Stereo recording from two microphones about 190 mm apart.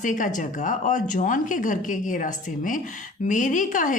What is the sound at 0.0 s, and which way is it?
A woman's voice, 40° left (ahead or behind).